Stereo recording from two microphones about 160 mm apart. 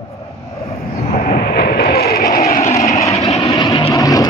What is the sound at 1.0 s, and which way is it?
Vehicle, 40° left (ahead or behind).